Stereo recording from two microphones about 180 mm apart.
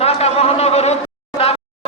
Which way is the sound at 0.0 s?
35° left (ahead or behind).